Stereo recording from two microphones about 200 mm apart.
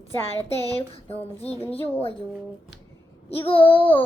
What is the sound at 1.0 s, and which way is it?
Speech, 30° left (ahead or behind).